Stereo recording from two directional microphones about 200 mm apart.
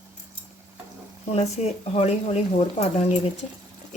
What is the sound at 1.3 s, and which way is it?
Speech, 30° left (ahead or behind).